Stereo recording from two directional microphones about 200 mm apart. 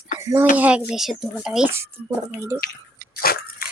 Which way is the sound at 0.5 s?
5° right (ahead or behind).